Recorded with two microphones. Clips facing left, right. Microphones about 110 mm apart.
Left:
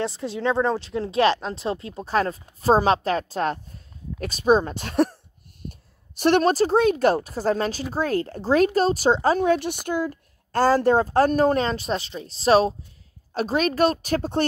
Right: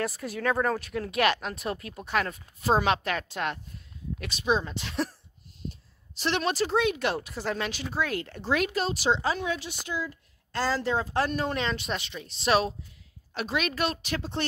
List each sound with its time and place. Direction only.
0.0 s speech: 25° left (ahead or behind); by 14.4 s 45° left (ahead or behind)